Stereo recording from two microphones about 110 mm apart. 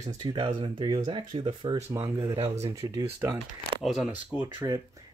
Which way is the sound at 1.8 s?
25° right (ahead or behind).